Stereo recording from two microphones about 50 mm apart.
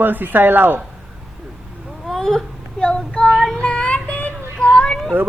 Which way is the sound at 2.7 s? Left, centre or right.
Centre.